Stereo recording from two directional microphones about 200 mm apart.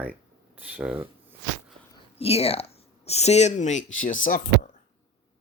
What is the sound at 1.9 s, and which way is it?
Speech, 30° left (ahead or behind).